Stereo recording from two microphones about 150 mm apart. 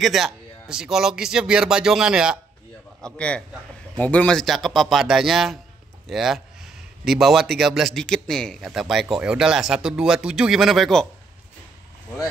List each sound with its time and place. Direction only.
0.0 s a man's voice: centre (ahead or behind)
3.0 s a man's voice: 5° left (ahead or behind)